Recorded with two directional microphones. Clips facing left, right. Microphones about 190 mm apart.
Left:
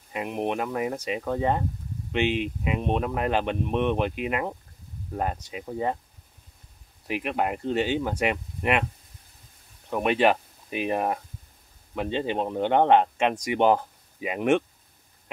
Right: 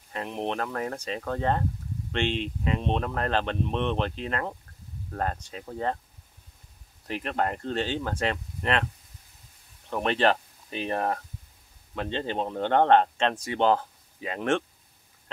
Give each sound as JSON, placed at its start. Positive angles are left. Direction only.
{"t": 0.1, "sound": "speech", "side_deg": 10}
{"t": 7.1, "sound": "speech", "side_deg": 10}
{"t": 9.8, "sound": "speech", "side_deg": 10}